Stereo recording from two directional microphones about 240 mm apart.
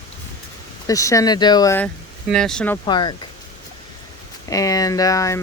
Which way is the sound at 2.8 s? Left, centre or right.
Centre.